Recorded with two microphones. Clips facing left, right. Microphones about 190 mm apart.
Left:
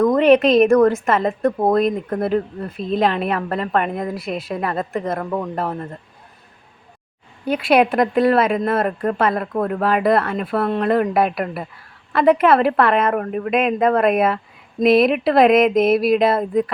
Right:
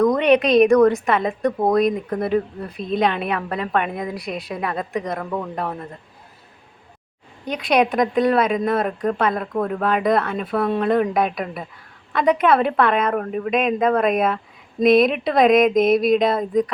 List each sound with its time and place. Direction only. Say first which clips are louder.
0.0 s a sound: left 3 dB; 5° left (ahead or behind)
0.4 s a woman's voice: left 1 dB; 5° left (ahead or behind)
5.2 s speech: left 3 dB; 15° left (ahead or behind)
7.4 s a woman's voice: left 3 dB; 5° left (ahead or behind)